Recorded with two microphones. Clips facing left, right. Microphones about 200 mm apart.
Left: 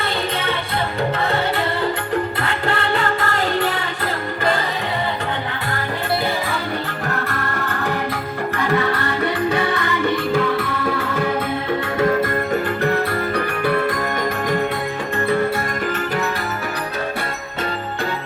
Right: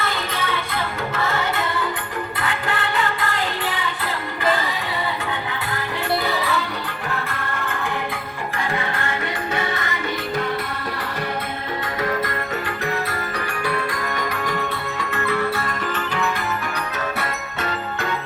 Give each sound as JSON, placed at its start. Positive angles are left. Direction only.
{"t": 1.2, "sound": "music", "side_deg": 35}
{"t": 2.6, "sound": "music", "side_deg": 45}
{"t": 7.1, "sound": "music", "side_deg": 40}
{"t": 9.8, "sound": "music", "side_deg": 55}
{"t": 12.8, "sound": "music", "side_deg": 55}